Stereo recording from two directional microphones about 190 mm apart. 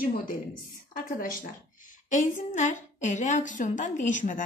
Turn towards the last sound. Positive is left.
turn(degrees=40)  # may be behind; listen again after turning